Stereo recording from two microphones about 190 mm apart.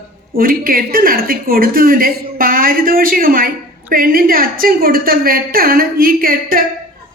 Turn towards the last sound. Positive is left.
turn(degrees=-50)  # may be behind; listen again after turning